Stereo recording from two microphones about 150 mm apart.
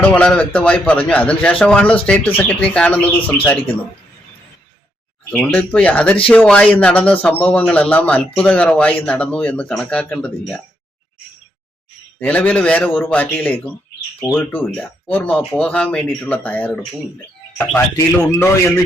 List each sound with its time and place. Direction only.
0.1 s speech: 10° left (ahead or behind)
3.2 s a man's voice: 35° left (ahead or behind)
3.4 s speech: 10° left (ahead or behind)
5.3 s speech: 10° left (ahead or behind)
12.2 s speech: 10° left (ahead or behind)